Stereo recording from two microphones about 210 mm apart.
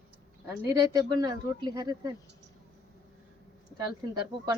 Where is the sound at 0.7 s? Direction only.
20° right (ahead or behind).